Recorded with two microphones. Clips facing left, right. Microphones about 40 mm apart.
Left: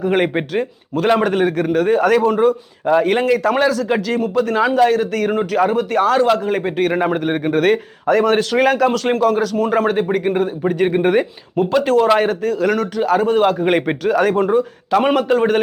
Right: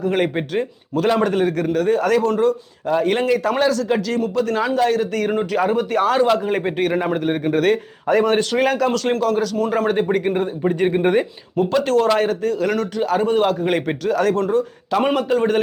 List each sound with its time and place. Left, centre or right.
0.0 s a man's voice: centre
0.5 s a man's voice: centre
7.0 s a man's voice: centre
8.0 s a man's voice: centre
12.4 s speech: centre
13.6 s a man's voice: centre
14.9 s a man's voice: centre